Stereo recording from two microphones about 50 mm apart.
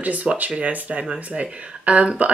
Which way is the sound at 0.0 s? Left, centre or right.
Right.